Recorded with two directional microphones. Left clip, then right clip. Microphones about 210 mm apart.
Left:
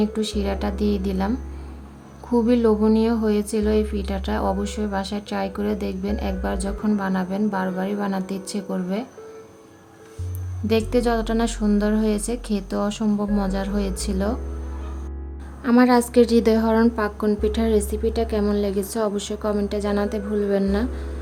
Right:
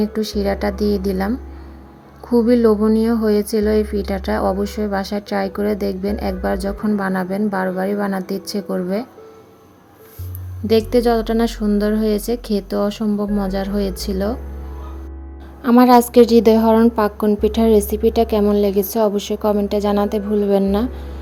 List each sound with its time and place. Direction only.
0.0 s a woman's voice: 10° right (ahead or behind)
10.7 s a woman's voice: 15° right (ahead or behind)
15.6 s a woman's voice: 20° right (ahead or behind)